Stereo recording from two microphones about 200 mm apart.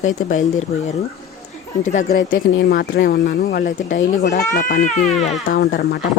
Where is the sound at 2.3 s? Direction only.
70° left (ahead or behind).